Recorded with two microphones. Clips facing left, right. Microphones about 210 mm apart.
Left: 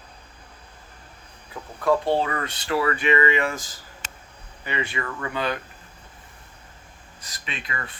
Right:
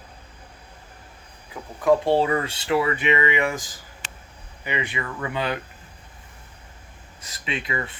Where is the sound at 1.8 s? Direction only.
15° right (ahead or behind).